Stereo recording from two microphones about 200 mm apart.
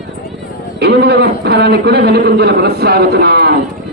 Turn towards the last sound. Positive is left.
turn(degrees=-55)  # may be behind; listen again after turning